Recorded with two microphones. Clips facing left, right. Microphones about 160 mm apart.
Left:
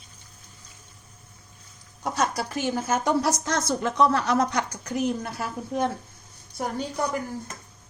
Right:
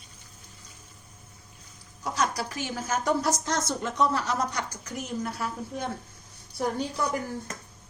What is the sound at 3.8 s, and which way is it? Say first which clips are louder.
A woman's voice: left 6 dB; 75° left (ahead or behind).